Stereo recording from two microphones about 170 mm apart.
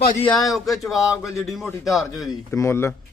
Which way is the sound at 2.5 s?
15° left (ahead or behind).